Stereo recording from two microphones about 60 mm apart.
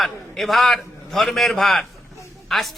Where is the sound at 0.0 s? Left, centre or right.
Centre.